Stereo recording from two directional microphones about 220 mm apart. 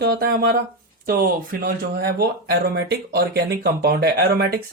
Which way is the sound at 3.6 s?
45° right (ahead or behind).